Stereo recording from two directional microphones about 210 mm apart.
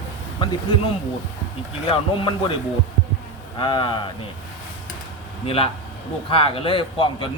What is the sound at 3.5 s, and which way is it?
Speech, 20° left (ahead or behind).